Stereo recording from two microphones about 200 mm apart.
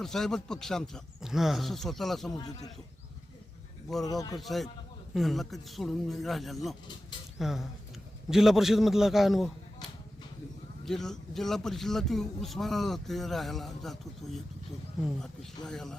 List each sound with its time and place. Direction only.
0.0 s speech: centre (ahead or behind)
2.3 s a man's voice: 20° left (ahead or behind)
4.0 s a man's voice: 20° left (ahead or behind)
4.4 s speech: centre (ahead or behind)
10.8 s speech: centre (ahead or behind)